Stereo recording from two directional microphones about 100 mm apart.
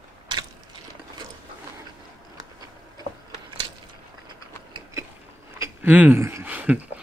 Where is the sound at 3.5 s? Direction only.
60° right (ahead or behind).